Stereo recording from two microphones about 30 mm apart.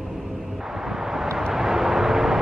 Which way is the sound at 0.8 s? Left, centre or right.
Centre.